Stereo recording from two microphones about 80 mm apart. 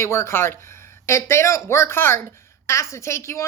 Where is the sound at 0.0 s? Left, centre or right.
Left.